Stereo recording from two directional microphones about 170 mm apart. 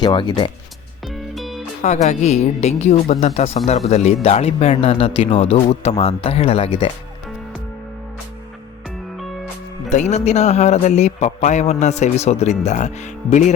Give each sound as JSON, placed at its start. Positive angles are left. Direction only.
{"t": 0.0, "sound": "speech", "side_deg": 30}
{"t": 1.0, "sound": "music", "side_deg": 0}
{"t": 1.8, "sound": "speech", "side_deg": 40}
{"t": 9.9, "sound": "speech", "side_deg": 40}